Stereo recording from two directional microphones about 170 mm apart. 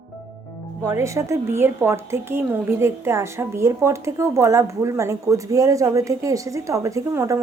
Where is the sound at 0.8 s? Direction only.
15° right (ahead or behind).